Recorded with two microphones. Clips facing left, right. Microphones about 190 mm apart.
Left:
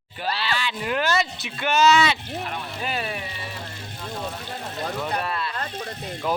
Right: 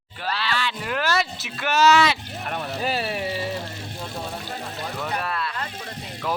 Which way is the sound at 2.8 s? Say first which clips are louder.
Right 4 dB; 35° right (ahead or behind).